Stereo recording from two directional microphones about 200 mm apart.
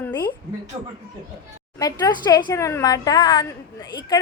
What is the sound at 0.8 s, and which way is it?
Speech, 20° right (ahead or behind).